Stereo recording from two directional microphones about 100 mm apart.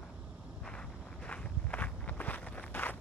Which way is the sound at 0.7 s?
10° left (ahead or behind).